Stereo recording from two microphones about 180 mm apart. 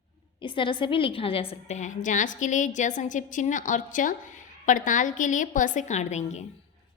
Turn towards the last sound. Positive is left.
turn(degrees=40)  # may be behind; listen again after turning